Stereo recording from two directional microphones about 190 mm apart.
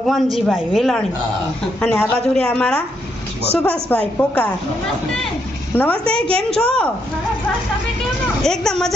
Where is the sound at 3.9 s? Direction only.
10° left (ahead or behind).